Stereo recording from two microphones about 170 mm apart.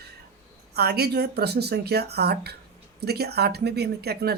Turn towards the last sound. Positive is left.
turn(degrees=-70)  # may be behind; listen again after turning